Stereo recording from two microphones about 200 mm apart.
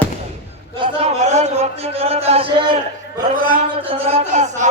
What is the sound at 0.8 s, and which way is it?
A man's voice, 35° right (ahead or behind).